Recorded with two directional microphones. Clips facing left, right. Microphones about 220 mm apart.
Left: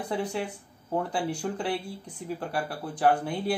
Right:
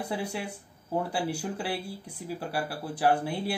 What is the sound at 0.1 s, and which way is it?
Speech, 10° right (ahead or behind).